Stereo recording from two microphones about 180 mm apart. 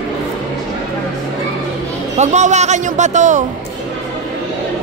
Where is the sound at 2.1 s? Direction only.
40° right (ahead or behind).